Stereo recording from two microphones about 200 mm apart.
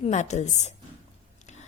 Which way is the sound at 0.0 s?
35° left (ahead or behind).